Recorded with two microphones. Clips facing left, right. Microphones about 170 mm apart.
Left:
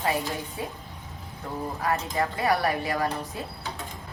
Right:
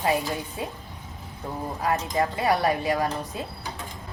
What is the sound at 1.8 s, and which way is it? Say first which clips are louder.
A woman's voice: right 3 dB; 20° right (ahead or behind).